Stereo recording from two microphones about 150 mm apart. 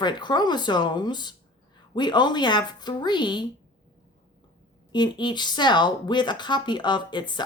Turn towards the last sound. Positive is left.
turn(degrees=30)  # may be behind; listen again after turning